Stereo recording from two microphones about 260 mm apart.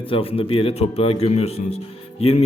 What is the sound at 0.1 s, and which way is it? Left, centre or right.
A man's voice, left.